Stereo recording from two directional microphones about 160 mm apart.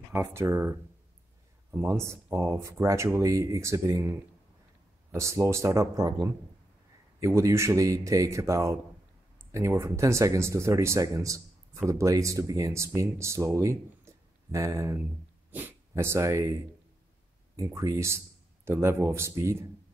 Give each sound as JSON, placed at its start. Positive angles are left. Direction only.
{"t": 0.1, "sound": "speech", "side_deg": -15}
{"t": 1.8, "sound": "speech", "side_deg": -15}
{"t": 17.6, "sound": "speech", "side_deg": -20}